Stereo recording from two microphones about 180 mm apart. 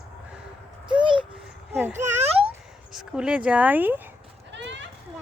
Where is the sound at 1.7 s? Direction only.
15° right (ahead or behind).